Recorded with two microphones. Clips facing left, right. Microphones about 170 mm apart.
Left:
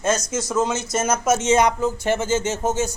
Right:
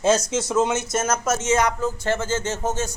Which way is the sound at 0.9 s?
Centre (ahead or behind).